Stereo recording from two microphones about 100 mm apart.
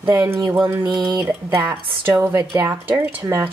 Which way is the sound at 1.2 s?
20° right (ahead or behind).